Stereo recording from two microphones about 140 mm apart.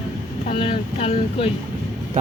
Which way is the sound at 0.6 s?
45° left (ahead or behind).